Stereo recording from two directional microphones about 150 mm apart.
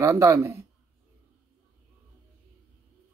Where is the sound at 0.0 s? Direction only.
20° right (ahead or behind).